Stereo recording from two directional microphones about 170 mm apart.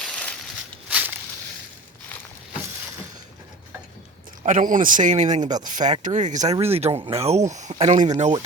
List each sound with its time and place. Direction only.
0.0 s a sound: 5° left (ahead or behind)
0.9 s walk: 5° right (ahead or behind)
4.4 s speech: 50° right (ahead or behind)